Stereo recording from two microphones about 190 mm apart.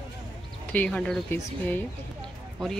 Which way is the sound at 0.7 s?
5° left (ahead or behind).